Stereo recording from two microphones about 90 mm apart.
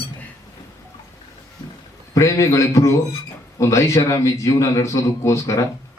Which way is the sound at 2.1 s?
35° left (ahead or behind).